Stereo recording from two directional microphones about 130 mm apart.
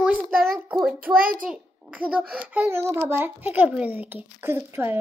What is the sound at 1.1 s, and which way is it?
Speech, 90° right.